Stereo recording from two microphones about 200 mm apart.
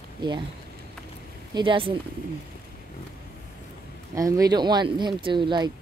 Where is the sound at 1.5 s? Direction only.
25° right (ahead or behind).